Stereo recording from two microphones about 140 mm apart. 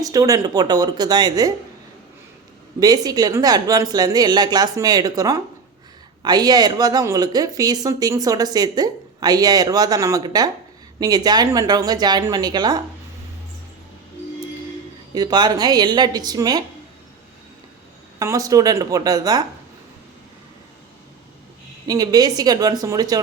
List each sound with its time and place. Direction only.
0.0 s a woman's voice: 25° right (ahead or behind)
2.8 s a woman's voice: 25° right (ahead or behind)
15.1 s a woman's voice: 30° right (ahead or behind)
18.2 s a woman's voice: 25° right (ahead or behind)
21.8 s a woman's voice: 25° right (ahead or behind)